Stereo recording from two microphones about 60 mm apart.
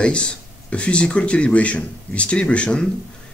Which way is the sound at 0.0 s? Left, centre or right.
Centre.